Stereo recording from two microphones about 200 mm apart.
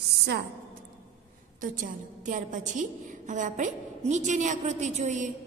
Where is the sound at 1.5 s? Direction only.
40° right (ahead or behind).